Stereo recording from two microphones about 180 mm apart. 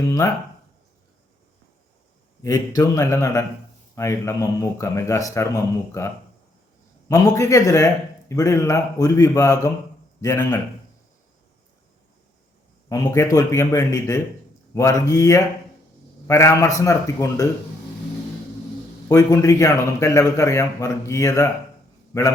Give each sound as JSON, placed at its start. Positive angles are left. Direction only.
{"t": 0.1, "sound": "a man's voice", "side_deg": 20}
{"t": 2.4, "sound": "a man's voice", "side_deg": 20}
{"t": 7.1, "sound": "a man's voice", "side_deg": 20}
{"t": 12.9, "sound": "a man's voice", "side_deg": 20}
{"t": 19.0, "sound": "a man's voice", "side_deg": 20}